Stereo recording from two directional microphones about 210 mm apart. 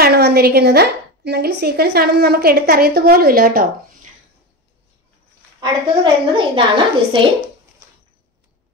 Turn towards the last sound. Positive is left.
turn(degrees=-25)  # may be behind; listen again after turning